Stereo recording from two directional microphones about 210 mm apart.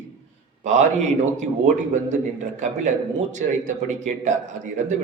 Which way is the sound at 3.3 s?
35° right (ahead or behind).